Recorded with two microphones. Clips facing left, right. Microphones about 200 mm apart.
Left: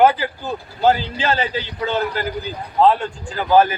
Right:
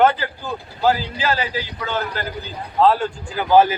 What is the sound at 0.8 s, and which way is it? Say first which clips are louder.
A man's voice: left 2 dB; 25° left (ahead or behind).